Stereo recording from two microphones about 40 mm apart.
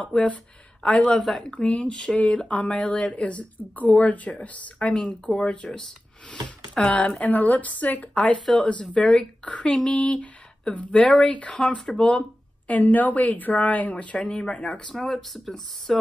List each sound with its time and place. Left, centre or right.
0.0 s speech: left
1.9 s speech: centre
2.1 s speech: left
4.9 s speech: left
6.8 s speech: left
11.5 s speech: centre
12.7 s speech: left
14.9 s speech: centre
15.1 s speech: centre